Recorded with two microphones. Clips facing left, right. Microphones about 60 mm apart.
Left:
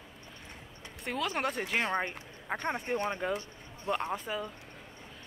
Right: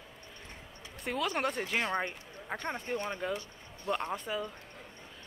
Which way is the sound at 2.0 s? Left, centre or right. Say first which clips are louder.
Left 2 dB; centre.